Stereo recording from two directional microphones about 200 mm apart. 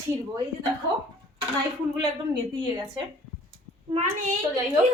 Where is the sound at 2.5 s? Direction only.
20° right (ahead or behind).